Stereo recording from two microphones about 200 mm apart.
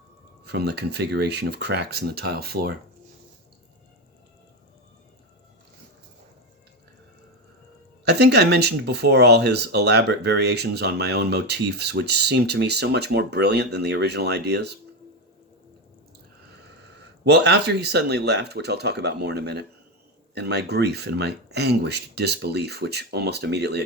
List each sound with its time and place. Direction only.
0.4 s speech: 55° right (ahead or behind)
8.0 s speech: 55° right (ahead or behind)
17.2 s speech: 55° right (ahead or behind)